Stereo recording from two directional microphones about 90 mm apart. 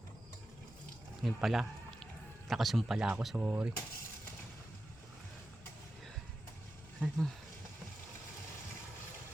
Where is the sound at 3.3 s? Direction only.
15° right (ahead or behind).